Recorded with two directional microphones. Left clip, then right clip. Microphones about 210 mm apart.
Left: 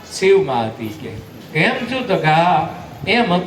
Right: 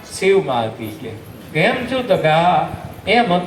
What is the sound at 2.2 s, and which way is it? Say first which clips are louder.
A man's voice: left 2 dB; 35° left (ahead or behind).